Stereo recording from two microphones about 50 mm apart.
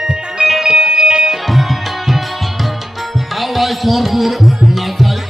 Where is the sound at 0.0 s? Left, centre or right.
Centre.